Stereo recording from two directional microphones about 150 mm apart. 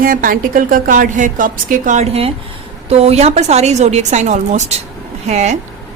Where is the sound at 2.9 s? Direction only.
45° right (ahead or behind).